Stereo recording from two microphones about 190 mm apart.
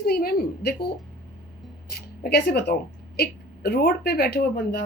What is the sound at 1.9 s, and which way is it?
A woman's voice, 60° left (ahead or behind).